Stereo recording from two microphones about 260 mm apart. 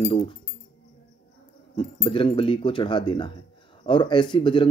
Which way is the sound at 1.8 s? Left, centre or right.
Left.